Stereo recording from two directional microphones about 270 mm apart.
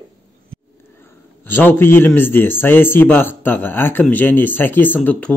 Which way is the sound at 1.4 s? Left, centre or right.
Centre.